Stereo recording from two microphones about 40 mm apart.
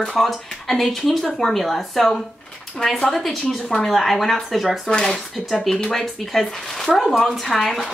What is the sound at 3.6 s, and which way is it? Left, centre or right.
Speech, left.